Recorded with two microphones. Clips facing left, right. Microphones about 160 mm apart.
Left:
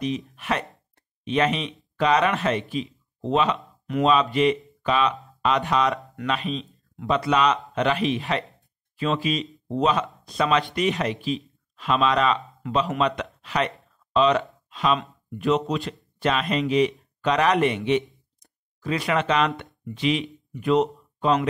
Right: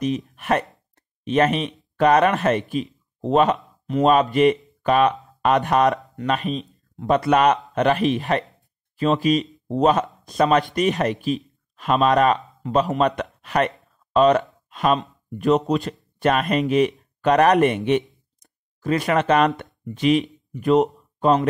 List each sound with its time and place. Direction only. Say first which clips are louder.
0.4 s speech: right 5 dB; 50° right (ahead or behind)